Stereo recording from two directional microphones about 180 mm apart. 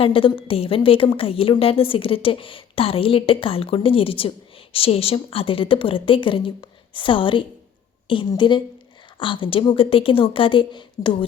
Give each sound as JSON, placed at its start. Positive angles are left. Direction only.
{"t": 0.0, "sound": "a woman's voice", "side_deg": 30}